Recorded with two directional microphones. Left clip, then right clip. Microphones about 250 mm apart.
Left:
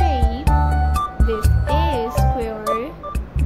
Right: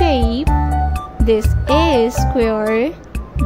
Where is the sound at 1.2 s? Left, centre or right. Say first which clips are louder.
Right 7 dB; right.